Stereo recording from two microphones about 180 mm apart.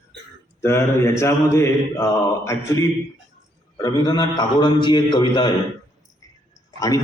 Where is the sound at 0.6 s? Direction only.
15° left (ahead or behind).